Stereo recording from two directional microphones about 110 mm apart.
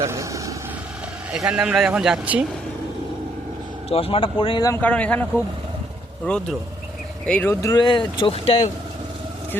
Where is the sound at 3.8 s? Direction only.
60° left (ahead or behind).